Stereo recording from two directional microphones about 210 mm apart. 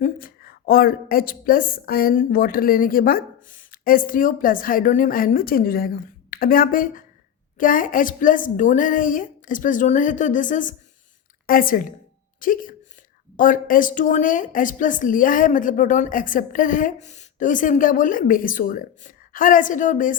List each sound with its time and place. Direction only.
0.0 s a woman's voice: 40° left (ahead or behind)